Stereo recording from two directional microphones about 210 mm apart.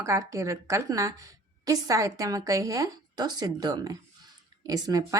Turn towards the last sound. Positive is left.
turn(degrees=-15)  # may be behind; listen again after turning